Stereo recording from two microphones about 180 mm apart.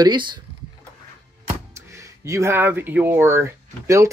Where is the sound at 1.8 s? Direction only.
15° right (ahead or behind).